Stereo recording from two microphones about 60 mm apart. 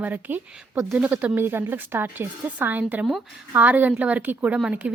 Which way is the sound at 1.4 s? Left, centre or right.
Right.